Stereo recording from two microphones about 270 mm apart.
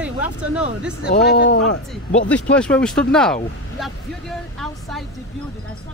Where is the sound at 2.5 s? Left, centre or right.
Centre.